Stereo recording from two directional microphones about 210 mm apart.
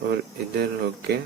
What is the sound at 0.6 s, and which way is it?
Speech, 50° right (ahead or behind).